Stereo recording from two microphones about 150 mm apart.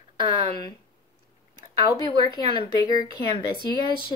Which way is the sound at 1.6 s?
30° right (ahead or behind).